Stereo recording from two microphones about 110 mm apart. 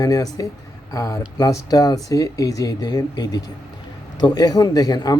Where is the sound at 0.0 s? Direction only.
35° left (ahead or behind).